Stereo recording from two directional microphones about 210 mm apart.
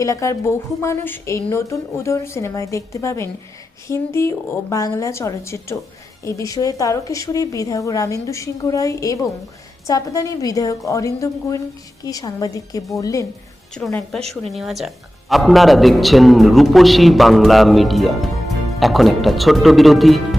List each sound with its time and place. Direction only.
0.0 s a woman's voice: 15° left (ahead or behind)
13.7 s a man's voice: 5° left (ahead or behind)